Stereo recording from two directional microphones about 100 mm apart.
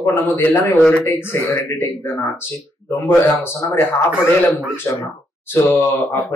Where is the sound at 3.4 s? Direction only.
25° left (ahead or behind).